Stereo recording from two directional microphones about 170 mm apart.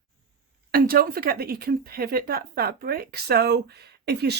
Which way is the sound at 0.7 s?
60° right (ahead or behind).